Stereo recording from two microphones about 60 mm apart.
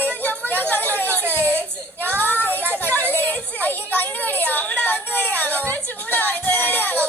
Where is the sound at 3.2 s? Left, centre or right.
Left.